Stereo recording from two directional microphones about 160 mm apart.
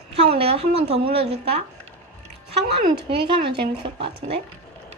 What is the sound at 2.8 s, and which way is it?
Speech, 35° right (ahead or behind).